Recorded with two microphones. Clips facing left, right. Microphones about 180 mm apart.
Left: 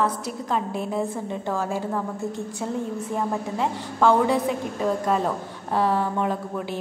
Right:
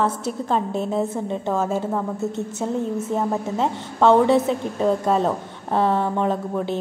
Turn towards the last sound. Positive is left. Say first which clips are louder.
# right 5 dB
turn(degrees=-25)  # may be behind; listen again after turning